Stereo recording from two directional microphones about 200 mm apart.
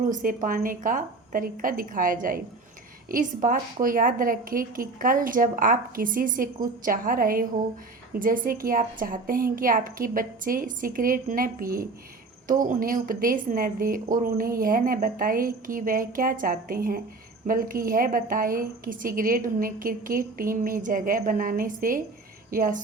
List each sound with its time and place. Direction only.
0.1 s a woman's voice: 40° right (ahead or behind)